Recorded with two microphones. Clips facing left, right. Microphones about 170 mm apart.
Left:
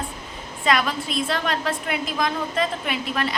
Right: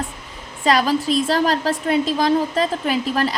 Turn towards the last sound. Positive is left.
turn(degrees=-35)  # may be behind; listen again after turning